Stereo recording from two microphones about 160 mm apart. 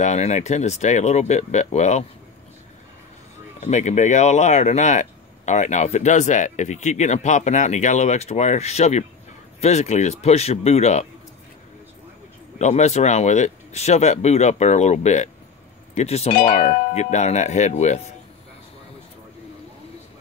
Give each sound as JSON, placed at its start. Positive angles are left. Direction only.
{"t": 0.0, "sound": "speech", "side_deg": 45}
{"t": 3.6, "sound": "speech", "side_deg": 45}
{"t": 12.5, "sound": "speech", "side_deg": 45}